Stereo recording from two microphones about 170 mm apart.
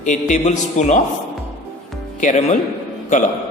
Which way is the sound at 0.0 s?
45° left (ahead or behind).